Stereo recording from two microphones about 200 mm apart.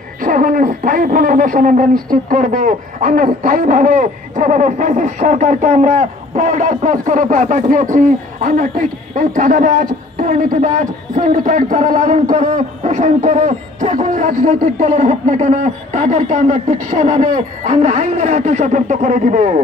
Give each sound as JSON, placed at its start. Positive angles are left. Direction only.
{"t": 0.2, "sound": "a man's voice", "side_deg": -45}